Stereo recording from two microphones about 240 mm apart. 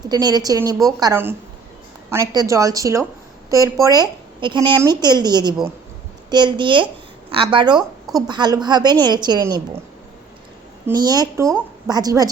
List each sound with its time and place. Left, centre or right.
0.1 s a woman's voice: centre
10.8 s a woman's voice: centre